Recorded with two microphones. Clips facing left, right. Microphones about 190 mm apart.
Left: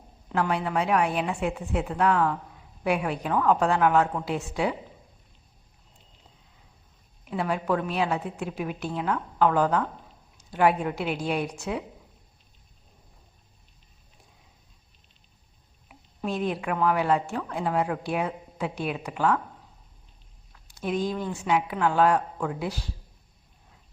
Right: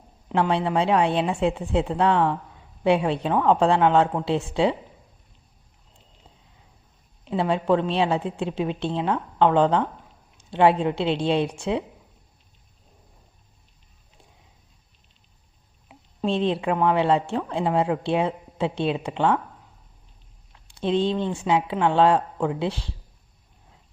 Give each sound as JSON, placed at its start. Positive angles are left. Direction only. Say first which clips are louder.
{"t": 0.3, "sound": "speech", "louder": "right 4 dB", "side_deg": -25}
{"t": 7.3, "sound": "speech", "louder": "right 5 dB", "side_deg": -25}
{"t": 15.9, "sound": "speech", "louder": "right 6 dB", "side_deg": -25}
{"t": 20.5, "sound": "speech", "louder": "right 5 dB", "side_deg": -25}